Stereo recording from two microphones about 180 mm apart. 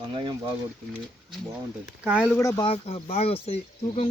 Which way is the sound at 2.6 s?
30° left (ahead or behind).